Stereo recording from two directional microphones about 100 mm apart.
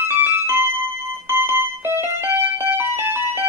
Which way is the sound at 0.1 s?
25° right (ahead or behind).